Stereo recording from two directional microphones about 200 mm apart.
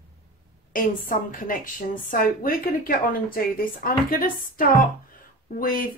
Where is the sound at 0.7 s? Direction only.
45° left (ahead or behind).